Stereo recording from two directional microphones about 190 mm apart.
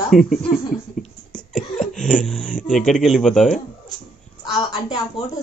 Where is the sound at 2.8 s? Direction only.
Centre (ahead or behind).